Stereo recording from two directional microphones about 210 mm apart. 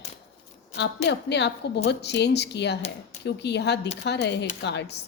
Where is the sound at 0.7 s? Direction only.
55° left (ahead or behind).